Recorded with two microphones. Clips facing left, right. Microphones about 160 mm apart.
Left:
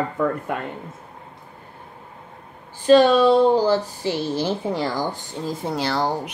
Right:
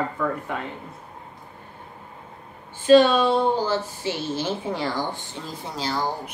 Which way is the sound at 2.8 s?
40° left (ahead or behind).